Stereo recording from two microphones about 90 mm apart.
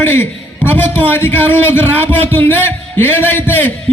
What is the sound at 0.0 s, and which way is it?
A man's voice, 25° left (ahead or behind).